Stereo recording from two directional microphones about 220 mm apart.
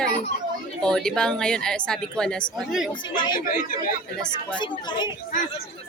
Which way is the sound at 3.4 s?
40° left (ahead or behind).